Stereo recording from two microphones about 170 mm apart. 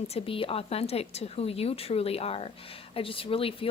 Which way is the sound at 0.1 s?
35° left (ahead or behind).